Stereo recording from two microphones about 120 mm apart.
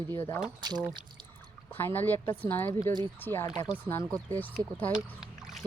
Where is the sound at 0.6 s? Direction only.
35° right (ahead or behind).